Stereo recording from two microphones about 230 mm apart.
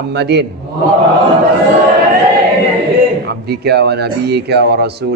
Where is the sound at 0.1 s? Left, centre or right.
Right.